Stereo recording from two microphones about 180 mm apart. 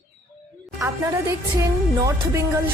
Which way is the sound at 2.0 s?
15° right (ahead or behind).